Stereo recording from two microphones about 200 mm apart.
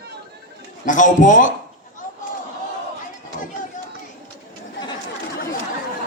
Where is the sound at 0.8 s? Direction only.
40° left (ahead or behind).